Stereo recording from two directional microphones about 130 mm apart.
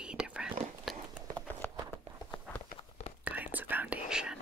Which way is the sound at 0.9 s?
Centre (ahead or behind).